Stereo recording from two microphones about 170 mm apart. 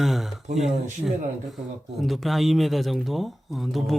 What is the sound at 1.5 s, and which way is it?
Speech, centre (ahead or behind).